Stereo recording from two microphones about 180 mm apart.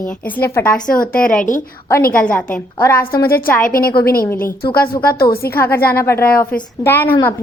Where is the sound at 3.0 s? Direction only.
55° left (ahead or behind).